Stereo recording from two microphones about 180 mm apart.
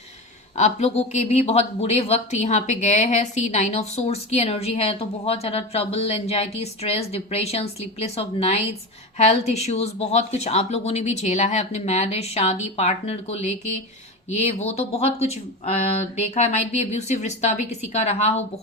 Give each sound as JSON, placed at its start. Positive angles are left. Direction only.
{"t": 0.5, "sound": "speech", "side_deg": 40}